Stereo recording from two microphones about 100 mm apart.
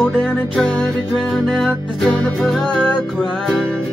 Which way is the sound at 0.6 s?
10° left (ahead or behind).